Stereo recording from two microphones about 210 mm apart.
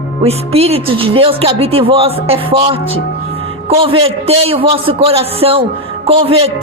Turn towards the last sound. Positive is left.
turn(degrees=-25)  # may be behind; listen again after turning